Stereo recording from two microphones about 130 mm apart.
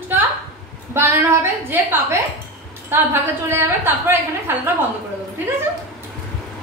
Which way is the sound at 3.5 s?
20° right (ahead or behind).